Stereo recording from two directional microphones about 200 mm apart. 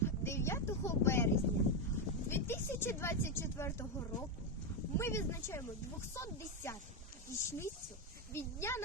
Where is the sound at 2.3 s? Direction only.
10° left (ahead or behind).